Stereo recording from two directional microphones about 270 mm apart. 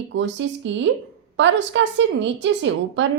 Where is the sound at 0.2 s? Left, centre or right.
Right.